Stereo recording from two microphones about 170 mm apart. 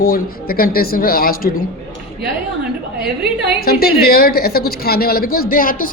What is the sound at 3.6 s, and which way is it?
A woman's voice, 65° left (ahead or behind).